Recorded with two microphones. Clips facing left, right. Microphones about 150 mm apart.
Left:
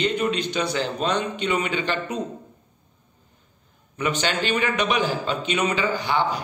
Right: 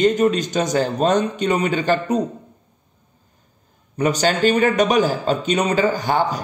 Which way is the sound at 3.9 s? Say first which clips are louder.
Right 6 dB; 40° right (ahead or behind).